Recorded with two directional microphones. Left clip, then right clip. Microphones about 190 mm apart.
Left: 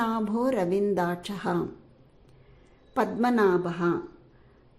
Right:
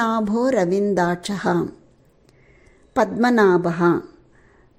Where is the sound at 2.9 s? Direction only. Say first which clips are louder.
Right 7 dB; 30° right (ahead or behind).